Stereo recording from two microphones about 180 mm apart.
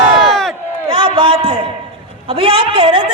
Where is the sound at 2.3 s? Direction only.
30° right (ahead or behind).